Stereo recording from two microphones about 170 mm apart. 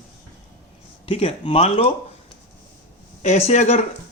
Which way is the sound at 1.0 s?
30° left (ahead or behind).